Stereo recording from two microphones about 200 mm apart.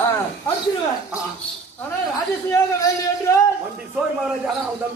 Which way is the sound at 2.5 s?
15° left (ahead or behind).